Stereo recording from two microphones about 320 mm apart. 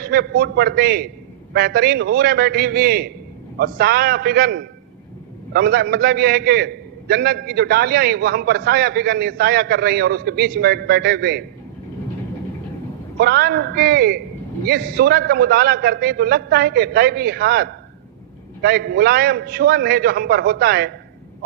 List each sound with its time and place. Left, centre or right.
0.0 s a man's voice: right
13.1 s a man's voice: right